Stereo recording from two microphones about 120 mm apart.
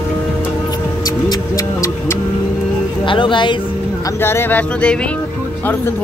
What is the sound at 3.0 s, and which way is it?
Speech, 45° left (ahead or behind).